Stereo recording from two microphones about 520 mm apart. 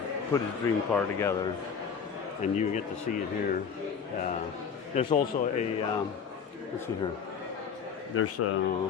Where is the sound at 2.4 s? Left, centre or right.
Centre.